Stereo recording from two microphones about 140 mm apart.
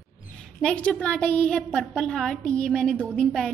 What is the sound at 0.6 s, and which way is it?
A woman's voice, 10° left (ahead or behind).